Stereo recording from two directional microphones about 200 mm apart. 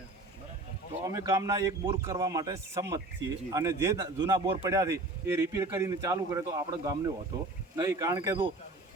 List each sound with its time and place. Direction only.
1.0 s a man's voice: 15° right (ahead or behind)